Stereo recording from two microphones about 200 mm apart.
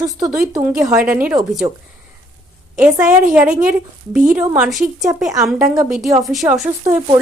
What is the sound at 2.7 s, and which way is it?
A woman's voice, 10° right (ahead or behind).